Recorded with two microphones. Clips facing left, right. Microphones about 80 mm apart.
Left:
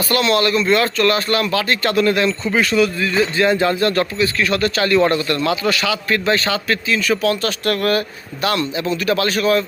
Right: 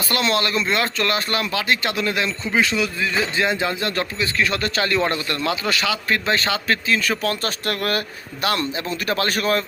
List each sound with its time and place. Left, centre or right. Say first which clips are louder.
0.1 s a man's voice: left 4 dB; right